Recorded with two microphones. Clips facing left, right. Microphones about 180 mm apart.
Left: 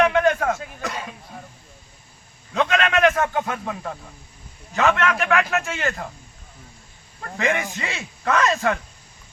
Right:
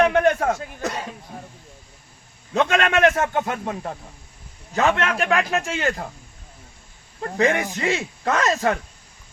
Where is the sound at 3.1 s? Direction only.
30° right (ahead or behind).